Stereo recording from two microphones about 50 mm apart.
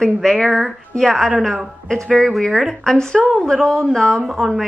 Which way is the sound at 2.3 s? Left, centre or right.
Centre.